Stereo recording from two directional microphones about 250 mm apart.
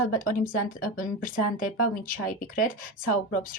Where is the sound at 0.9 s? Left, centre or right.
Left.